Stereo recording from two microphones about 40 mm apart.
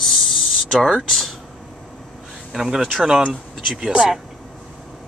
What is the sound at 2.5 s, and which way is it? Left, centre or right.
Speech, centre.